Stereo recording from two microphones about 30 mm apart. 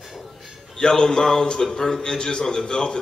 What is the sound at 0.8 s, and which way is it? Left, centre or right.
A man's voice, left.